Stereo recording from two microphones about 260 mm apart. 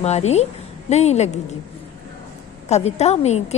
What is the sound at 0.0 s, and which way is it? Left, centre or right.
A woman's voice, left.